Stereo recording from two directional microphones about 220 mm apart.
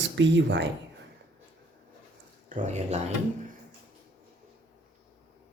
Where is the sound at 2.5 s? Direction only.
30° right (ahead or behind).